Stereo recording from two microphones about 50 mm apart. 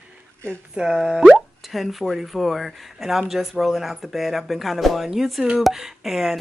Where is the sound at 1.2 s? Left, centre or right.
Centre.